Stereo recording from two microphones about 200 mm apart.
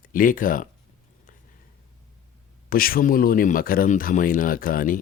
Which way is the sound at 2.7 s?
45° left (ahead or behind).